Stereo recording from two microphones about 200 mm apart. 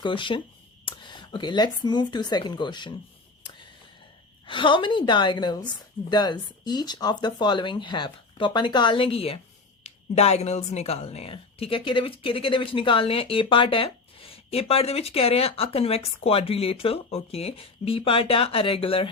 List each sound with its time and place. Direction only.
0.0 s speech: 25° left (ahead or behind)
4.4 s speech: 25° left (ahead or behind)